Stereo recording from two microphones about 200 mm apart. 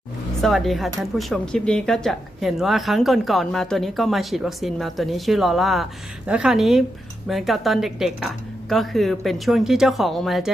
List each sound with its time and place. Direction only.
0.4 s a woman's voice: centre (ahead or behind)